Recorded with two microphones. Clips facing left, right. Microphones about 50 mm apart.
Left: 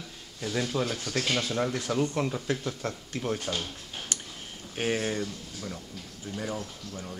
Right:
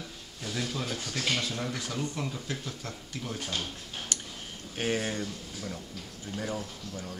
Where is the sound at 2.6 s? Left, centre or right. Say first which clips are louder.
Left 6 dB; left.